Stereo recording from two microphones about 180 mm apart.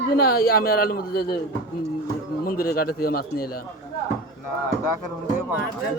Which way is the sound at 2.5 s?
55° left (ahead or behind).